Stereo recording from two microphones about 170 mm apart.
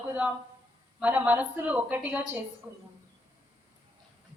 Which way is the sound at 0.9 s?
10° right (ahead or behind).